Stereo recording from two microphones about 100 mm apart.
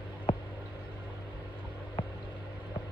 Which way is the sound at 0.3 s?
55° left (ahead or behind).